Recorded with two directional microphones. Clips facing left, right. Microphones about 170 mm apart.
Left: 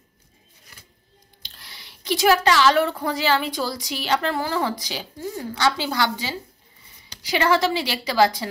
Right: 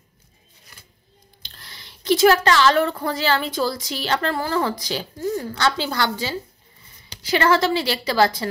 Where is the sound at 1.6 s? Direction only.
15° left (ahead or behind).